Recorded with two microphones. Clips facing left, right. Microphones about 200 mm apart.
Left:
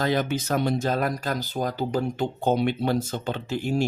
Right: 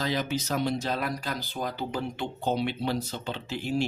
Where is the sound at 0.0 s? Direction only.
55° left (ahead or behind).